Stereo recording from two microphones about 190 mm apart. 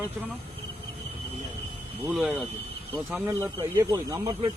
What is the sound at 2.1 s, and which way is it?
Speech, 5° right (ahead or behind).